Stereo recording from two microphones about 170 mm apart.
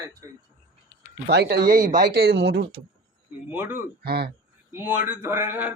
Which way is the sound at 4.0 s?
65° right (ahead or behind).